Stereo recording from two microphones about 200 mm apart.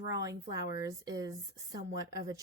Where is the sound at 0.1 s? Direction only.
15° right (ahead or behind).